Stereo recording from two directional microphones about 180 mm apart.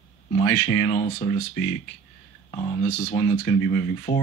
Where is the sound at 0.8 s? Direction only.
35° left (ahead or behind).